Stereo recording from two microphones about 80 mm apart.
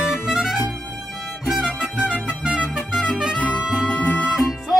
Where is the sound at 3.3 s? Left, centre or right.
Centre.